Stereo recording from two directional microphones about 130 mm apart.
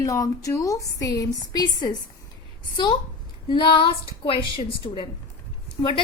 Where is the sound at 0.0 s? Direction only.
25° left (ahead or behind).